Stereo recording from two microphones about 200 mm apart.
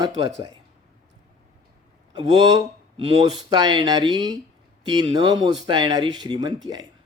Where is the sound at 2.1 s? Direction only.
20° right (ahead or behind).